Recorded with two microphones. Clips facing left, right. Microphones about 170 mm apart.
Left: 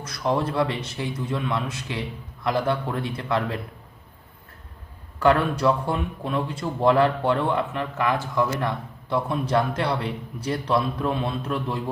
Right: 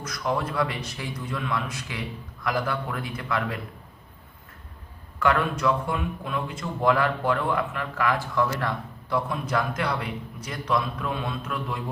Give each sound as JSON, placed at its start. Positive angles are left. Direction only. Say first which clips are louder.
{"t": 0.0, "sound": "a man's voice", "louder": "left 3 dB", "side_deg": 30}
{"t": 5.2, "sound": "a man's voice", "louder": "left 4 dB", "side_deg": 30}